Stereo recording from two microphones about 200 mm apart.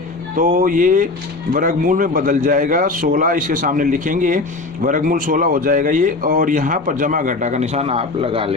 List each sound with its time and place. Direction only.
0.3 s a man's voice: 40° right (ahead or behind)